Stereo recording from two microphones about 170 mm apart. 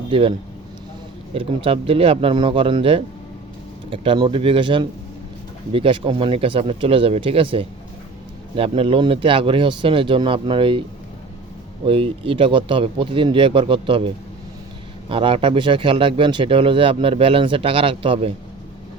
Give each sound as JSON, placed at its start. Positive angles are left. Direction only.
{"t": 0.1, "sound": "speech", "side_deg": -30}
{"t": 11.9, "sound": "speech", "side_deg": -30}
{"t": 15.1, "sound": "speech", "side_deg": -30}